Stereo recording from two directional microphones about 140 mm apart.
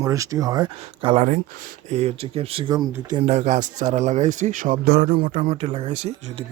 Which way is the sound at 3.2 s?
55° right (ahead or behind).